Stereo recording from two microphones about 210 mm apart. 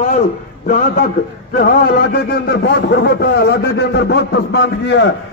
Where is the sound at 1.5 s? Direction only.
45° left (ahead or behind).